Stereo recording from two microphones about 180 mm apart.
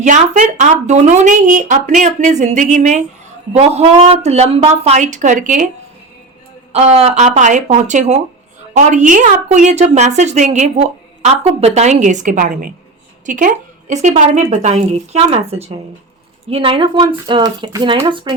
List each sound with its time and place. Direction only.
0.0 s a woman's voice: 40° right (ahead or behind)
6.7 s a woman's voice: 35° right (ahead or behind)